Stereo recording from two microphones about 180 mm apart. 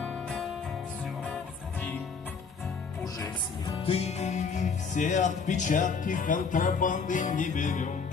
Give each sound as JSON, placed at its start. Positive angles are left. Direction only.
{"t": 3.8, "sound": "music", "side_deg": 35}